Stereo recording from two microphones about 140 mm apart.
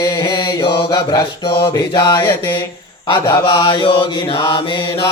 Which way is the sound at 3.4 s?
35° left (ahead or behind).